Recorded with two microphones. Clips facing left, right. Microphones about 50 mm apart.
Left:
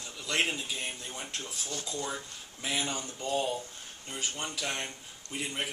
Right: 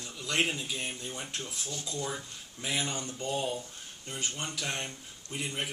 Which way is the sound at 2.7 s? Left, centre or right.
Centre.